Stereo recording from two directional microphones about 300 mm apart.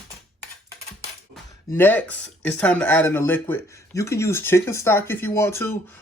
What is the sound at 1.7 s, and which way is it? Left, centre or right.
Speech, centre.